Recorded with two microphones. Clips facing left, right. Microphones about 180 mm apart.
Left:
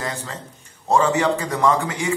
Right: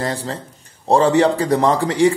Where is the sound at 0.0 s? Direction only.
35° right (ahead or behind).